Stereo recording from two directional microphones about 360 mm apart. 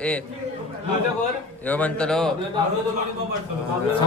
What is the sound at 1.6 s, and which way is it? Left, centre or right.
Speech, centre.